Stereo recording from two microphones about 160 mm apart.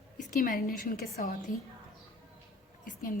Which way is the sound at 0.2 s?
55° left (ahead or behind).